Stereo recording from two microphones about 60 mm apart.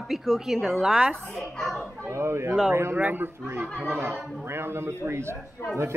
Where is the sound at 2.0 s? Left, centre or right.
Right.